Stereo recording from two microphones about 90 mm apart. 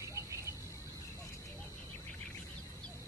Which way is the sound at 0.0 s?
35° right (ahead or behind).